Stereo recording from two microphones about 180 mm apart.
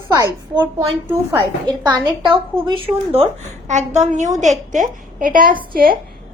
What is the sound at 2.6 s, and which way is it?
A woman's voice, 30° right (ahead or behind).